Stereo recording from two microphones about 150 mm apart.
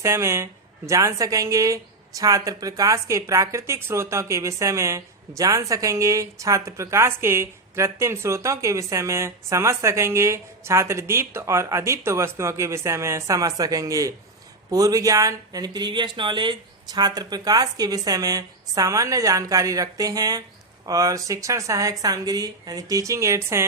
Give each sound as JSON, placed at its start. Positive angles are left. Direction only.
{"t": 0.0, "sound": "a woman's voice", "side_deg": -20}